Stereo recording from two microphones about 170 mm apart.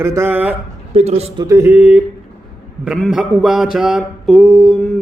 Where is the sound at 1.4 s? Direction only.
15° right (ahead or behind).